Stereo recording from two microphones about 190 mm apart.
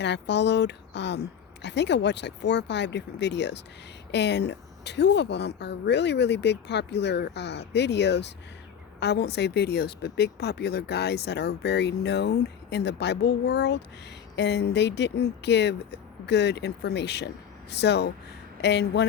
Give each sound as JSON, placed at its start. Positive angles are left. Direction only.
{"t": 0.0, "sound": "speech", "side_deg": 65}